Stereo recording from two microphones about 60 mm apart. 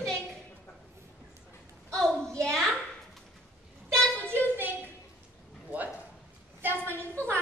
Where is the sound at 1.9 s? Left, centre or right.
Centre.